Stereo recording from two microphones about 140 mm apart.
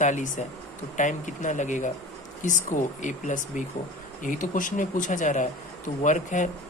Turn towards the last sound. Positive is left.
turn(degrees=60)  # may be behind; listen again after turning